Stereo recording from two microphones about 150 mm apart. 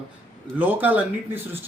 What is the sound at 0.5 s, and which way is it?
Speech, 10° right (ahead or behind).